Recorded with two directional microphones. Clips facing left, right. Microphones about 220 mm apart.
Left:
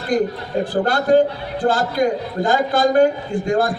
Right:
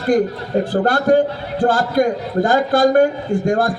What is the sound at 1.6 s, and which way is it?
A man's voice, 50° right (ahead or behind).